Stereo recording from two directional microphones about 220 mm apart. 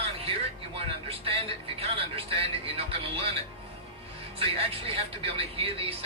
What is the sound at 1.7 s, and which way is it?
Speech, 25° right (ahead or behind).